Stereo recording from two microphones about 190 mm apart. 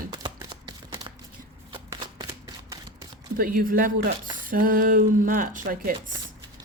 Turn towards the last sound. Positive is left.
turn(degrees=-50)  # may be behind; listen again after turning